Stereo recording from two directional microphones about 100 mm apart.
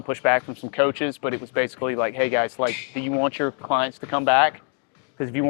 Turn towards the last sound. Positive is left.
turn(degrees=25)  # may be behind; listen again after turning